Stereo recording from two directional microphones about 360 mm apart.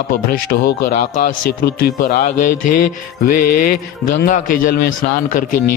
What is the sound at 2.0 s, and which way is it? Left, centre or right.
Speech, left.